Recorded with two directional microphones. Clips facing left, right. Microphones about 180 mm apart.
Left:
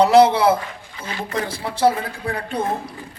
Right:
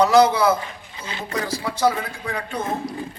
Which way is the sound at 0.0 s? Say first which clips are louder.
Left 2 dB; 30° left (ahead or behind).